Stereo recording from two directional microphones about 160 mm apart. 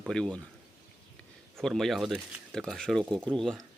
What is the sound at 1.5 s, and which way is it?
Speech, centre (ahead or behind).